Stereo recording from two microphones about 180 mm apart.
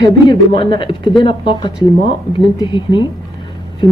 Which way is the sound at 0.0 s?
25° left (ahead or behind).